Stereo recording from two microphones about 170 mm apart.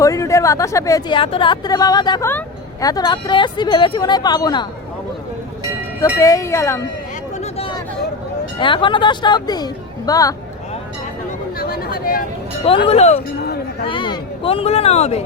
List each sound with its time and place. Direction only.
0.0 s a woman's voice: 20° left (ahead or behind)
6.1 s speech: 20° left (ahead or behind)
7.4 s a sound: 35° left (ahead or behind)
8.5 s a woman's voice: 30° left (ahead or behind)
11.5 s a sound: 65° left (ahead or behind)
12.6 s speech: 35° left (ahead or behind)